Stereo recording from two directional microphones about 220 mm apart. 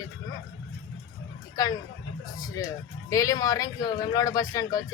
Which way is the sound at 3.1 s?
15° left (ahead or behind).